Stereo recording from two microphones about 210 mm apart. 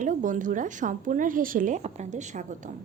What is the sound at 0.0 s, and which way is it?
A woman's voice, 35° right (ahead or behind).